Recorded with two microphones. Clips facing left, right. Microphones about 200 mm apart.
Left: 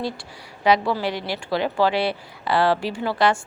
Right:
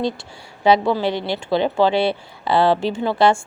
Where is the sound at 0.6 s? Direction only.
25° right (ahead or behind).